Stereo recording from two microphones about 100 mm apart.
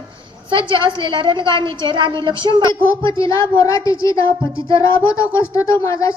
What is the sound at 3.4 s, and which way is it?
Speech, 30° left (ahead or behind).